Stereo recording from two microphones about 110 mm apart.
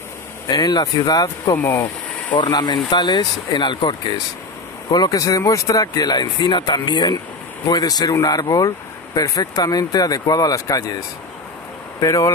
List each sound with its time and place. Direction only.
0.5 s speech: 40° left (ahead or behind); by 1.9 s 25° left (ahead or behind)
2.3 s speech: 45° left (ahead or behind)
12.0 s speech: 30° left (ahead or behind)